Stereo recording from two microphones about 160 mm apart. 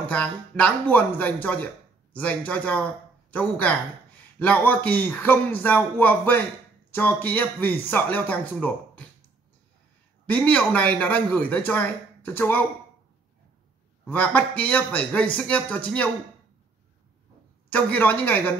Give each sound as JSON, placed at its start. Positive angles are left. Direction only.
{"t": 0.1, "sound": "speech", "side_deg": 10}
{"t": 10.2, "sound": "speech", "side_deg": 10}
{"t": 14.0, "sound": "speech", "side_deg": 10}
{"t": 17.6, "sound": "speech", "side_deg": 10}